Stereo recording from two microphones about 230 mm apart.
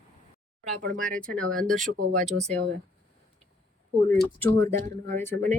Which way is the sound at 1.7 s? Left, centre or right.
Right.